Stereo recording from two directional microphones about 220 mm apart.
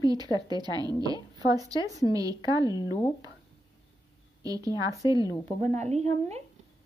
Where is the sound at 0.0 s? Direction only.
20° right (ahead or behind).